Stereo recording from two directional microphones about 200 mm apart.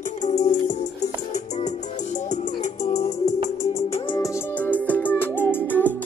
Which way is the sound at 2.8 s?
35° left (ahead or behind).